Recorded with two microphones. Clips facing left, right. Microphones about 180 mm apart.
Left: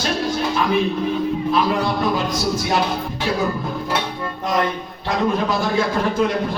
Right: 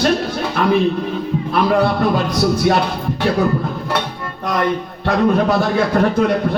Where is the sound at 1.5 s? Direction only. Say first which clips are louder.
Right 6 dB; 60° right (ahead or behind).